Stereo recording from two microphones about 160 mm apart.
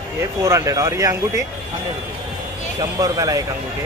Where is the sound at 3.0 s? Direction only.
20° right (ahead or behind).